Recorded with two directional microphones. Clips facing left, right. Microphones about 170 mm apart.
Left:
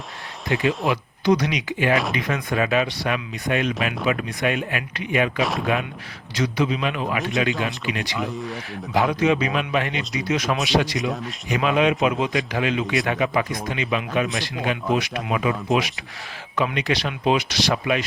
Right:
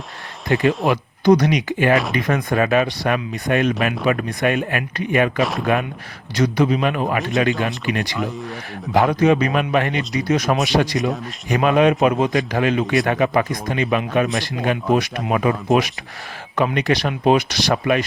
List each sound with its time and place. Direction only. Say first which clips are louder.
0.4 s speech: right 4 dB; 50° right (ahead or behind)
5.4 s speech: right 3 dB; centre (ahead or behind)
6.3 s speech: right 5 dB; 50° right (ahead or behind)
8.1 s speech: right 2 dB; centre (ahead or behind)
8.9 s speech: right 4 dB; 50° right (ahead or behind)